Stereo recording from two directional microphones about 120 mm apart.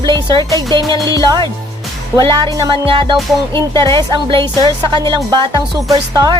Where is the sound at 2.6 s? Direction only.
40° right (ahead or behind).